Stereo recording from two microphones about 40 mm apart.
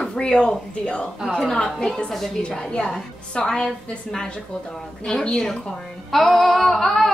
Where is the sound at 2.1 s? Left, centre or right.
Centre.